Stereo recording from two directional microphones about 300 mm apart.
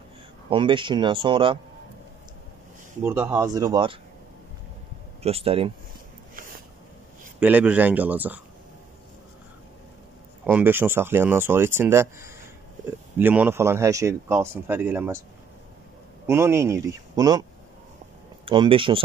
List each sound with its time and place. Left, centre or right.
0.5 s speech: centre
3.0 s speech: centre
5.2 s speech: centre
7.3 s speech: centre
10.4 s speech: centre
16.3 s speech: centre